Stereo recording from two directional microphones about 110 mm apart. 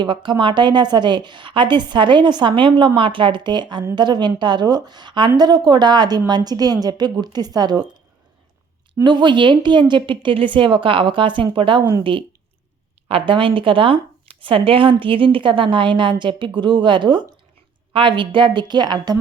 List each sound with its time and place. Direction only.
0.0 s a woman's voice: 45° right (ahead or behind)
9.0 s a woman's voice: 45° right (ahead or behind)
13.1 s a woman's voice: 55° right (ahead or behind)